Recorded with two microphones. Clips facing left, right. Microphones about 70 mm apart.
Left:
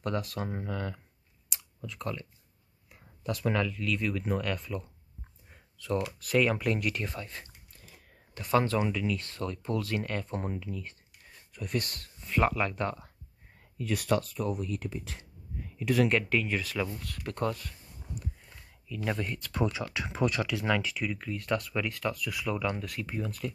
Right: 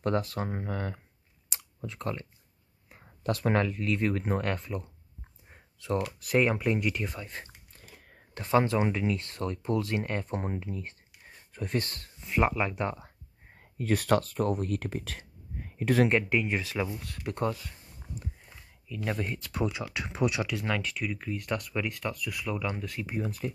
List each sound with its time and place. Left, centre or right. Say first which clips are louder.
0.0 s speech: right 4 dB; right
1.5 s clicking: right 2 dB; right
2.9 s speech: right 4 dB; right
4.6 s speech: right 1 dB; right
5.5 s a sound: right 1 dB; right
6.5 s speech: right 1 dB; centre
8.5 s speech: right 2 dB; right
12.2 s speech: right 1 dB; centre
13.6 s speech: right 4 dB; right
15.5 s a sound: right 2 dB; right
16.1 s speech: right 1 dB; centre
18.9 s speech: even; centre
23.1 s speech: right 3 dB; centre